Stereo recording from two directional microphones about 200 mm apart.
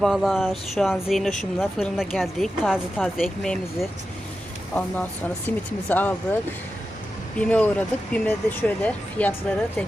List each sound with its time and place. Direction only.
0.0 s a woman's voice: centre (ahead or behind)
5.5 s speech: 10° left (ahead or behind)
7.3 s speech: 5° left (ahead or behind)